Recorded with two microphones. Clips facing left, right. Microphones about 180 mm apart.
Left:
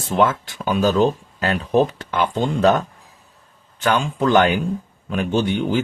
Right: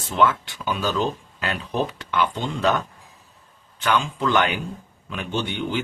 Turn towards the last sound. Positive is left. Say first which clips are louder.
# left 6 dB
turn(degrees=45)  # may be behind; listen again after turning